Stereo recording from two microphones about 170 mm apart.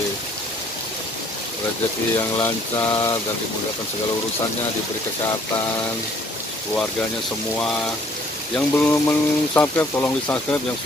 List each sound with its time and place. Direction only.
2.1 s speech: 15° left (ahead or behind)
8.5 s speech: 10° left (ahead or behind)